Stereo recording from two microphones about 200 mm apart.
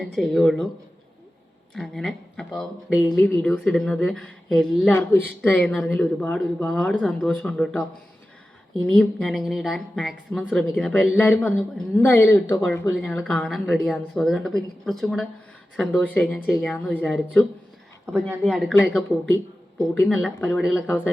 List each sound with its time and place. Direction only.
0.0 s speech: centre (ahead or behind)
1.7 s speech: centre (ahead or behind)
9.0 s speech: centre (ahead or behind)
19.9 s speech: 5° left (ahead or behind)